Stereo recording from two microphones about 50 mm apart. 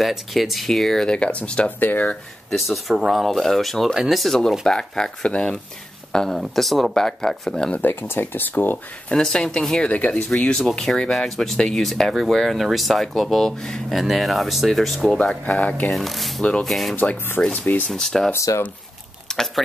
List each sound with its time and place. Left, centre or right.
0.0 s speech: centre; by 1.7 s left
1.8 s speech: left
2.5 s speech: centre
7.8 s speech: left
9.1 s speech: centre
10.6 s speech: centre
13.9 s speech: centre
15.4 s speech: left
15.9 s speech: centre
16.9 s speech: left
17.9 s speech: centre
18.3 s speech: left
19.2 s a sound: centre